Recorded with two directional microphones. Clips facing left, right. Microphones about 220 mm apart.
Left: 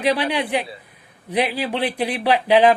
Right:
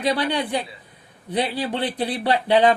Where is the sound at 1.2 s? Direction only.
10° left (ahead or behind).